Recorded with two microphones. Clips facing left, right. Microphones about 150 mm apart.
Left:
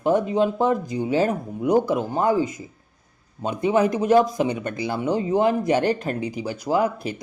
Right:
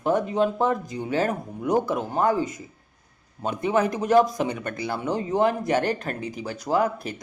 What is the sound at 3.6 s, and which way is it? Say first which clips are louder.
Speech: left 4 dB; 15° left (ahead or behind).